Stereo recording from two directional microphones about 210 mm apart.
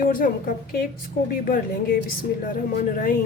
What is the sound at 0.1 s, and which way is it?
A woman's voice, 40° left (ahead or behind).